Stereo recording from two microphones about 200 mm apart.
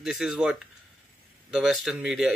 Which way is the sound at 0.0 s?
5° right (ahead or behind).